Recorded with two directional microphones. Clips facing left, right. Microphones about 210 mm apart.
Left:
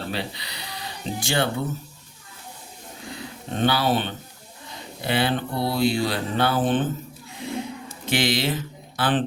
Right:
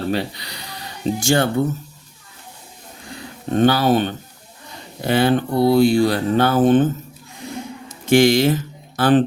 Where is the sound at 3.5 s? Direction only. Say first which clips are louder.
Right 7 dB; 45° right (ahead or behind).